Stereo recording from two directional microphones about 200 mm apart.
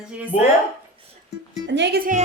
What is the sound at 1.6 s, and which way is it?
Speech, 60° right (ahead or behind).